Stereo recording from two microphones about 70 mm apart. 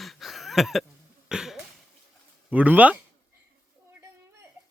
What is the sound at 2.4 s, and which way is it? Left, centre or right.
Speech, right.